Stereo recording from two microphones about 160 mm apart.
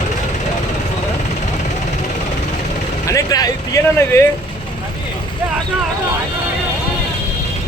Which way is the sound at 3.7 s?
20° left (ahead or behind).